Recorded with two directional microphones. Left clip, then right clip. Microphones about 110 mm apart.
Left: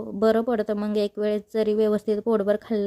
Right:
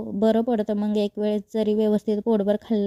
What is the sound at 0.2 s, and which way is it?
A woman's voice, 15° right (ahead or behind).